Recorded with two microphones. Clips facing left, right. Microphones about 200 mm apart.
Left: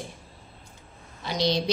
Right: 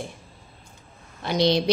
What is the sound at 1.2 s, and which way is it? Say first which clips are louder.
Speech: right 5 dB; 55° right (ahead or behind).